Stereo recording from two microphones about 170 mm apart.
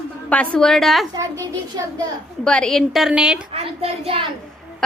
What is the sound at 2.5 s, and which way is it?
Speech, 5° left (ahead or behind).